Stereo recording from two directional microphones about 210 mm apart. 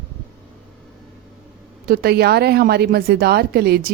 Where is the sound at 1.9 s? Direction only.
45° right (ahead or behind).